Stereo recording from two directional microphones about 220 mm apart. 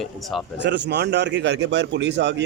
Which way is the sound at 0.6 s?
50° right (ahead or behind).